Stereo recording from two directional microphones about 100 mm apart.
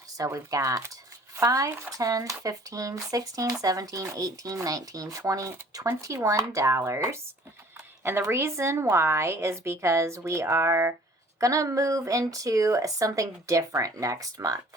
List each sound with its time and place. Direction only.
0.2 s speech: 35° right (ahead or behind)